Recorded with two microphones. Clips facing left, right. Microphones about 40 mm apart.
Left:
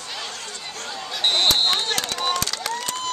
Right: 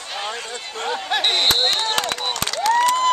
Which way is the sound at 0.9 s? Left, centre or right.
Right.